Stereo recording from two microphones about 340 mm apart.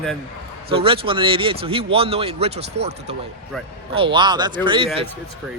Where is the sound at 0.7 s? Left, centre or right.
Centre.